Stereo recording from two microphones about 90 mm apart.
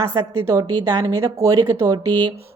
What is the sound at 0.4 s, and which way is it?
A woman's voice, 45° right (ahead or behind).